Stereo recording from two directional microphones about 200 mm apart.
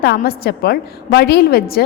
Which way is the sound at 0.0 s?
50° left (ahead or behind).